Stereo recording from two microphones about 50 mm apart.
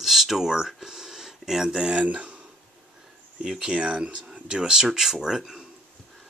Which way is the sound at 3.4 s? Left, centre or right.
Centre.